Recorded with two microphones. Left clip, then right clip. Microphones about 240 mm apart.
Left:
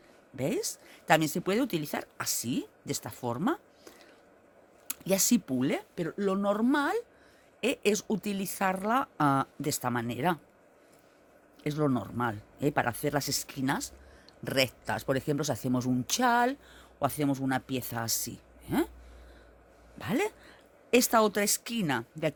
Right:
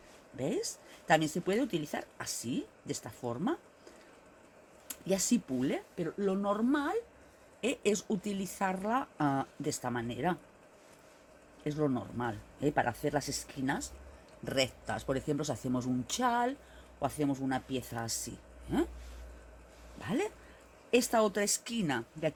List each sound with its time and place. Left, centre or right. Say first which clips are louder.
0.3 s speech: left 3 dB; left
4.9 s speech: left 4 dB; left
11.6 s speech: left 3 dB; left
20.0 s speech: left 4 dB; left